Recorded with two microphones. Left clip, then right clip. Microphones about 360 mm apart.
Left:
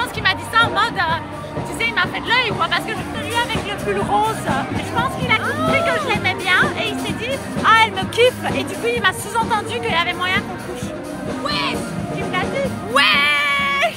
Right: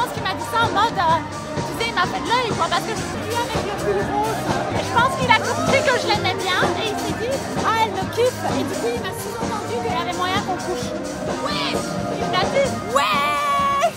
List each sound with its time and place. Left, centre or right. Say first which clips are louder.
0.0 s music: left 4 dB; centre
1.8 s speech: left 2 dB; centre
4.9 s music: right 2 dB; right
6.2 s music: left 4 dB; centre
7.6 s music: left 7 dB; centre
9.8 s speech: left 4 dB; centre
12.9 s a sound: left 5 dB; centre